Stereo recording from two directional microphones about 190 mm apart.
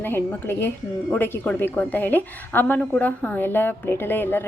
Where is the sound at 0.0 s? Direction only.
10° left (ahead or behind).